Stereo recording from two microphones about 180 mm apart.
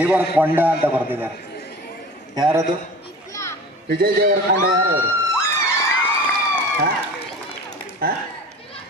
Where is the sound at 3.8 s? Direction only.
55° right (ahead or behind).